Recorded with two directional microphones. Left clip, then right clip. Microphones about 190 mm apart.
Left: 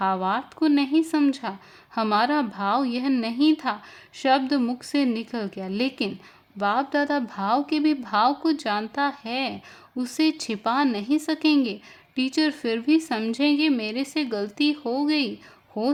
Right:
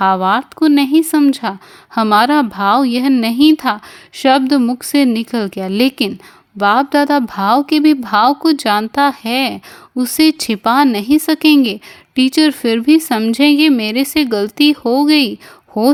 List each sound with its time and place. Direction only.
0.0 s a woman's voice: 35° right (ahead or behind)